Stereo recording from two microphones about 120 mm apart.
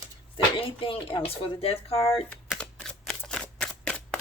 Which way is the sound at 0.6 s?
45° left (ahead or behind).